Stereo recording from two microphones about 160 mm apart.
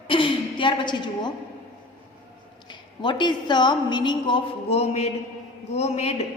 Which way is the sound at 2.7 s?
30° left (ahead or behind).